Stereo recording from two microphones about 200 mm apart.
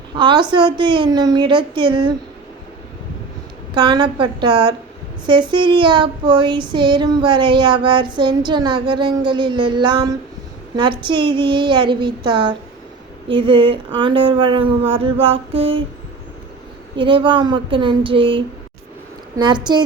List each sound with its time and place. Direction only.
0.2 s child singing: 25° right (ahead or behind)
3.8 s child singing: 20° right (ahead or behind)
17.0 s child singing: 25° right (ahead or behind)